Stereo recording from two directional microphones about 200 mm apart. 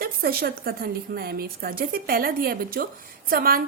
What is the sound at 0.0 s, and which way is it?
A woman's voice, 50° right (ahead or behind).